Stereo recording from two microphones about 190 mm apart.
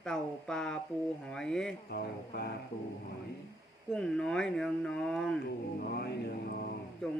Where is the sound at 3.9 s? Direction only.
5° left (ahead or behind).